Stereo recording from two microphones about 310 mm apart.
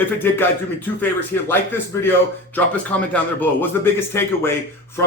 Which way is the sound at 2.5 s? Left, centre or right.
Centre.